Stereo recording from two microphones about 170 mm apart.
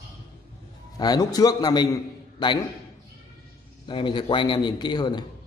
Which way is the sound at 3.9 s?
30° left (ahead or behind).